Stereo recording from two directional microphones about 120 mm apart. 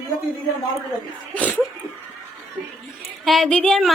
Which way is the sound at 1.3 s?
15° left (ahead or behind).